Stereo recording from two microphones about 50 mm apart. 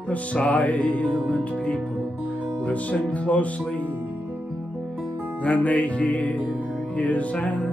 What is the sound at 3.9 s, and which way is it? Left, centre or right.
Music, right.